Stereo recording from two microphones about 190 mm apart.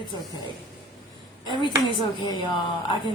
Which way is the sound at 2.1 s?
25° left (ahead or behind).